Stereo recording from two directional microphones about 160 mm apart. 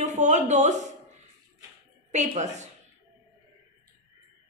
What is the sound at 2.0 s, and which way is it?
Speech, 45° right (ahead or behind).